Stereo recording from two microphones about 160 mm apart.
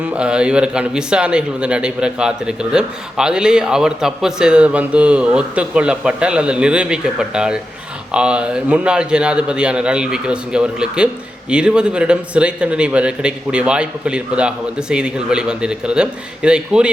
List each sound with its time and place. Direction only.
0.0 s a man's voice: 5° right (ahead or behind)